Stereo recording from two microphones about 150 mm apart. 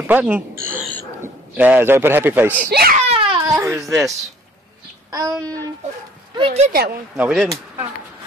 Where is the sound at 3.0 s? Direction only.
40° right (ahead or behind).